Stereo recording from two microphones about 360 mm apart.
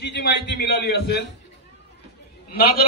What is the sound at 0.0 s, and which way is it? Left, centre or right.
A man's voice, left.